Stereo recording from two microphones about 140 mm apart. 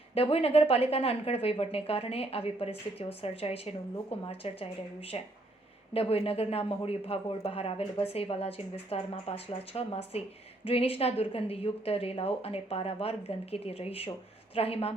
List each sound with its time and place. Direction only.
0.1 s speech: 45° left (ahead or behind)